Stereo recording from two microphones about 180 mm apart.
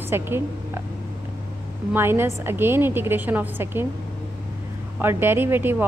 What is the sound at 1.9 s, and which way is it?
Speech, 15° right (ahead or behind).